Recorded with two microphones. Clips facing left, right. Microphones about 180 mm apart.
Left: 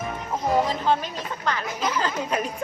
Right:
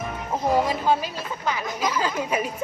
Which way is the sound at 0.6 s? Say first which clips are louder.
Right 1 dB; 10° right (ahead or behind).